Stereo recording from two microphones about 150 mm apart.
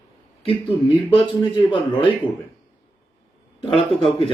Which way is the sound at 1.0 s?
35° left (ahead or behind).